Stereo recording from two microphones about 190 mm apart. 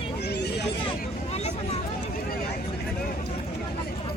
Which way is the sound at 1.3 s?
35° left (ahead or behind).